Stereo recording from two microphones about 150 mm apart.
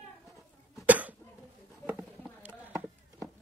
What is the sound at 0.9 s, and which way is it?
Cough, 10° right (ahead or behind).